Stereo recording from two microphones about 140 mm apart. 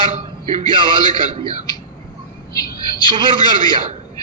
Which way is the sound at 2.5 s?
25° left (ahead or behind).